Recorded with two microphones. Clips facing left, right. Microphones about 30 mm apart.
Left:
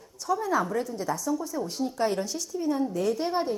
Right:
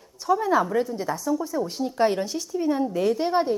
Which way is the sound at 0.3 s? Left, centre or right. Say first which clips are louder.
Right 5 dB; right.